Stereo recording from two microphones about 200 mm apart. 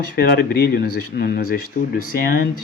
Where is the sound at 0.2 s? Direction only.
45° left (ahead or behind).